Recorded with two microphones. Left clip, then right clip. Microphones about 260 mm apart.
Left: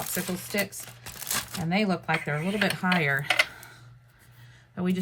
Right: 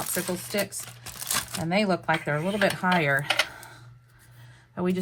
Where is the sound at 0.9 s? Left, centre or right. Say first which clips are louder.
Right 2 dB; right.